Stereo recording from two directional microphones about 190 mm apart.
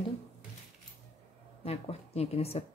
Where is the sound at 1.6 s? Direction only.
30° left (ahead or behind).